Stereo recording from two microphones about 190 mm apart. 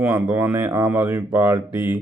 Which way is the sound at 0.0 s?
10° right (ahead or behind).